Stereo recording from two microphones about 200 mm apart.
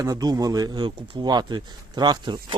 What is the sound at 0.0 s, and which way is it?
Speech, 20° right (ahead or behind).